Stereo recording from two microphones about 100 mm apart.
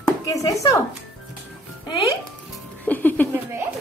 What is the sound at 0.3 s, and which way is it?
Speech, 35° left (ahead or behind).